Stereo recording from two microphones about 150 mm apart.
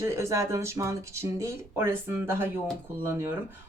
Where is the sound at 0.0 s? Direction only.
20° right (ahead or behind).